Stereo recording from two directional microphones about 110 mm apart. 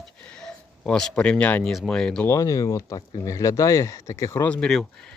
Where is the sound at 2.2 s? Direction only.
30° left (ahead or behind).